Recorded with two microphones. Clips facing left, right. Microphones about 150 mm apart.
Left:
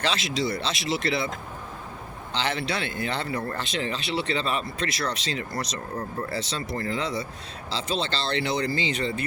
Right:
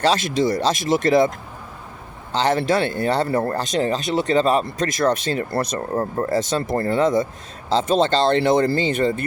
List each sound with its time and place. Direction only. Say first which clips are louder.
0.0 s speech: right 8 dB; 45° right (ahead or behind)
2.3 s speech: right 10 dB; 40° right (ahead or behind)